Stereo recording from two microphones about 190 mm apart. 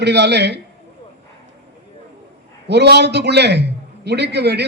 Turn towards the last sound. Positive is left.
turn(degrees=-60)  # may be behind; listen again after turning